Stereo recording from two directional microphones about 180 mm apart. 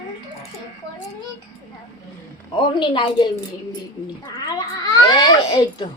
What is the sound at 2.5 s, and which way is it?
Speech, 25° left (ahead or behind).